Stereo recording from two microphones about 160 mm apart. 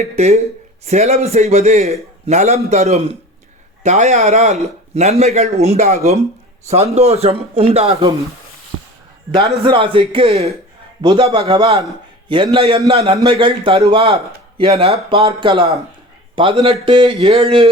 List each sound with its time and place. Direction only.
0.2 s a man's voice: 40° right (ahead or behind)
9.3 s a man's voice: 30° right (ahead or behind)
16.8 s a sound: 30° right (ahead or behind)
17.2 s speech: 40° right (ahead or behind)